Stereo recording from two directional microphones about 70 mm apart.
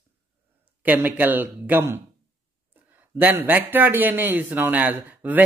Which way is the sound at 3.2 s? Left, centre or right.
Right.